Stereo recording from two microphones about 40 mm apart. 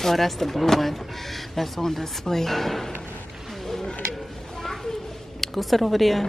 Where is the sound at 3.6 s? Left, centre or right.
Centre.